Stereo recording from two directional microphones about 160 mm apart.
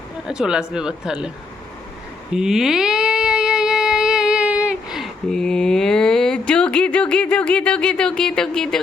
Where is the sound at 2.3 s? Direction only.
5° right (ahead or behind).